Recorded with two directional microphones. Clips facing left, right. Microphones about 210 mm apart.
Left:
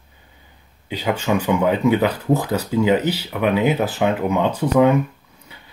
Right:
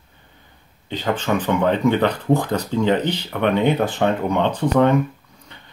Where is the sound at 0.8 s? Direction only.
10° left (ahead or behind).